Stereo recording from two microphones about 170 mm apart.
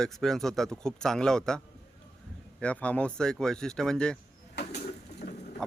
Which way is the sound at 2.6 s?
5° left (ahead or behind).